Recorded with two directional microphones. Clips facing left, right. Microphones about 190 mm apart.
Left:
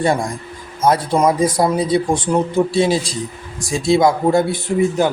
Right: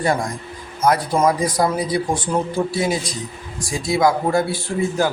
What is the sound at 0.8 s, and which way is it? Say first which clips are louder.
A man's voice: left 2 dB; 25° left (ahead or behind).